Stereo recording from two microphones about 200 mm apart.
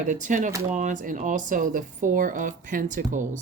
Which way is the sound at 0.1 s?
40° right (ahead or behind).